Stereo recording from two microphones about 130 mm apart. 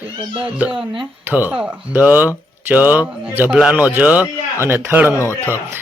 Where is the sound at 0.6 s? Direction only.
10° right (ahead or behind).